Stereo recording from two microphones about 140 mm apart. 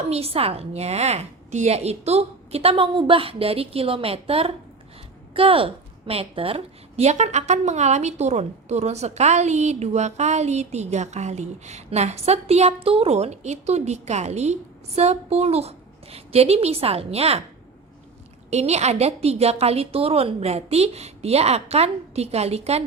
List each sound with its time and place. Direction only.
0.0 s a woman's voice: 45° right (ahead or behind)
18.5 s a woman's voice: 50° right (ahead or behind)